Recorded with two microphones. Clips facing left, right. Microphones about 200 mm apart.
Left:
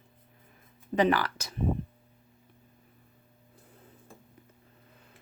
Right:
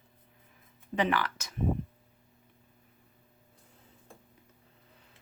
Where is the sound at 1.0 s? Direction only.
35° left (ahead or behind).